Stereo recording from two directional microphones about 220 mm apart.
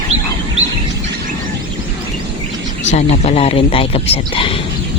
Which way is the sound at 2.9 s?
30° left (ahead or behind).